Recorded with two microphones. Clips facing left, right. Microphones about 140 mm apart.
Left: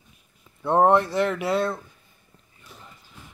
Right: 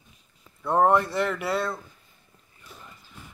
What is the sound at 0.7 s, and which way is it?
Speech, 30° left (ahead or behind).